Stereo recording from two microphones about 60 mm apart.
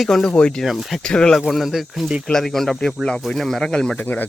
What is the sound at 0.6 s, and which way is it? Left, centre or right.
Speech, centre.